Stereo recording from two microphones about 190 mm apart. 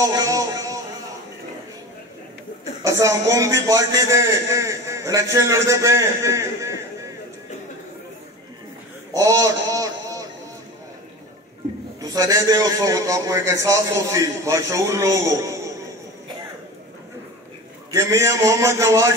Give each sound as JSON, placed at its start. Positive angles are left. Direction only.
{"t": 0.0, "sound": "television", "side_deg": -15}
{"t": 2.8, "sound": "a man's voice", "side_deg": -15}
{"t": 9.1, "sound": "a sound", "side_deg": -15}
{"t": 12.0, "sound": "a man's voice", "side_deg": -15}
{"t": 17.9, "sound": "a man's voice", "side_deg": -15}